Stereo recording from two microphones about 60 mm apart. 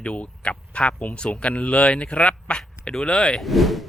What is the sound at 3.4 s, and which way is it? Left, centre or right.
Speech, centre.